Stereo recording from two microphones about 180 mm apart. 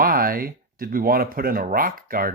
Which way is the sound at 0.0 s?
55° right (ahead or behind).